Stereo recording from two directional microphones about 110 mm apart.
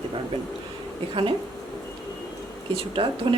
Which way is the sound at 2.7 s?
55° right (ahead or behind).